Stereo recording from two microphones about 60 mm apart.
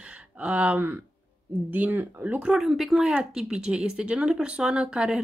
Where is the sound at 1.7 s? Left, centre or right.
Right.